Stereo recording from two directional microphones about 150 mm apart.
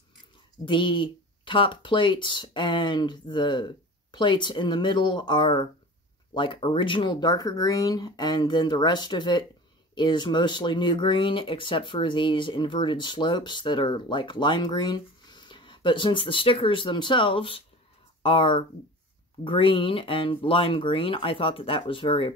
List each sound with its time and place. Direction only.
0.7 s speech: 35° left (ahead or behind)